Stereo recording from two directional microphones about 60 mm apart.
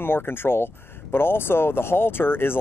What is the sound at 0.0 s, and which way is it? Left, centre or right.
Speech, left.